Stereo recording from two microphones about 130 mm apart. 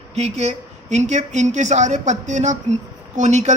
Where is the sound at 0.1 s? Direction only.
60° right (ahead or behind).